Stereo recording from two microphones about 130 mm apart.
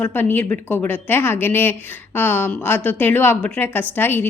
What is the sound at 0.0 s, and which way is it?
A woman's voice, 15° left (ahead or behind).